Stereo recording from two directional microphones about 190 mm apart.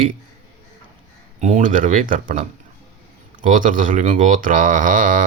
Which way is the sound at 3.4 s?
45° right (ahead or behind).